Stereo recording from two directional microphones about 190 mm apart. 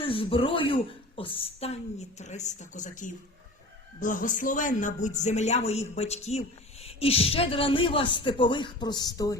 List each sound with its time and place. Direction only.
0.0 s a woman's voice: 30° left (ahead or behind)